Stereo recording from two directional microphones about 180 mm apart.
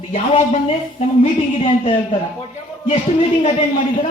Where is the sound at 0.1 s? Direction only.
40° left (ahead or behind).